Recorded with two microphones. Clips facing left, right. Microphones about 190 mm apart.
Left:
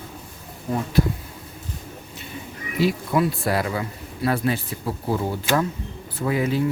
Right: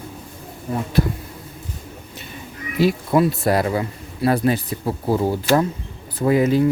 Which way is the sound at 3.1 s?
40° right (ahead or behind).